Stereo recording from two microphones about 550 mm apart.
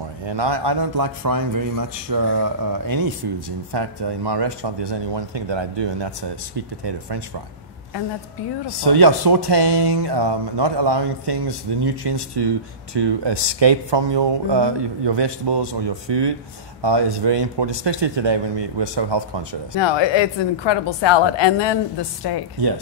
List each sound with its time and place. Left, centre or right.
0.2 s speech: right
8.8 s speech: right
19.8 s a woman's voice: left